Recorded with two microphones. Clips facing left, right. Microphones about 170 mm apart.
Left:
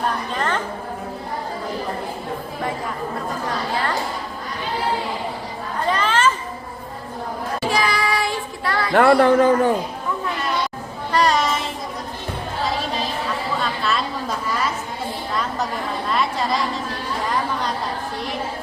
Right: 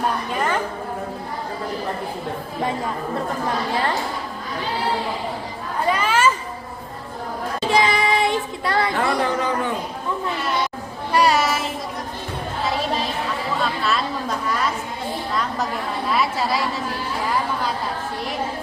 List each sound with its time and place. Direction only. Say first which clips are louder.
0.3 s a sound: right 2 dB; 10° right (ahead or behind)
5.9 s children playing: even; 10° right (ahead or behind)
7.6 s child singing: right 3 dB; 20° right (ahead or behind)
8.9 s a man's voice: left 8 dB; 60° left (ahead or behind); by 9.7 s 45° left (ahead or behind)
11.1 s child singing: right 1 dB; 10° right (ahead or behind)
13.8 s chatter: even; centre (ahead or behind)
16.0 s a woman's voice: right 1 dB; 5° right (ahead or behind)